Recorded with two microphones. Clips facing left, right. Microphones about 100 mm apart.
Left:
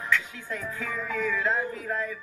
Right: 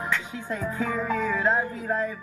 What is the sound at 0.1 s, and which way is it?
Speech, 30° right (ahead or behind).